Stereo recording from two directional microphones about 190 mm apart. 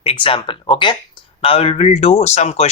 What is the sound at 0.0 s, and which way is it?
Speech, 30° left (ahead or behind).